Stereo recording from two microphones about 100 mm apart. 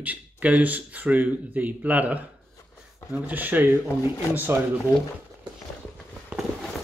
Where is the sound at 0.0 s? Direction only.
15° right (ahead or behind).